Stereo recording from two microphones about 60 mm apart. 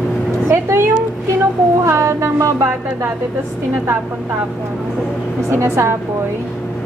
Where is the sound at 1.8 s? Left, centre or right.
Right.